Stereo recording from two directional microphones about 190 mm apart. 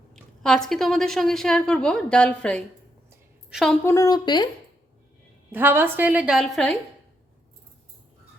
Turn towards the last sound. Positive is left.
turn(degrees=5)  # may be behind; listen again after turning